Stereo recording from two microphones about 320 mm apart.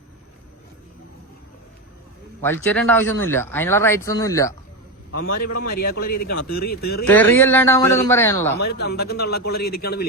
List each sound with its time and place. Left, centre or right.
2.4 s speech: centre
5.3 s a man's voice: left
5.7 s a man's voice: left
7.0 s speech: centre
8.5 s a man's voice: left